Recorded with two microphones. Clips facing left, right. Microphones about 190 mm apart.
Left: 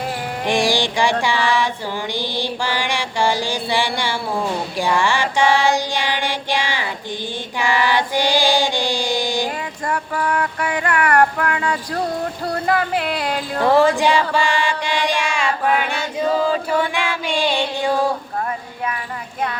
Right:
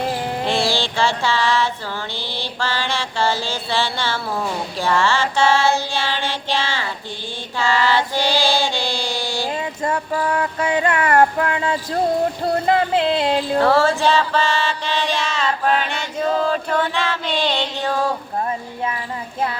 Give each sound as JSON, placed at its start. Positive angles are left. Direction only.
{"t": 0.4, "sound": "mantra", "side_deg": 15}
{"t": 7.6, "sound": "child singing", "side_deg": 15}
{"t": 9.5, "sound": "a sound", "side_deg": -25}
{"t": 13.6, "sound": "mantra", "side_deg": 15}